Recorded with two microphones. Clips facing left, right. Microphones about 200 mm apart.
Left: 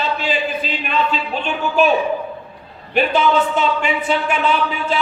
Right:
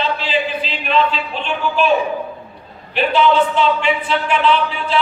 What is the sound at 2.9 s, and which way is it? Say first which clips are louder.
Speech: right 1 dB; 45° left (ahead or behind).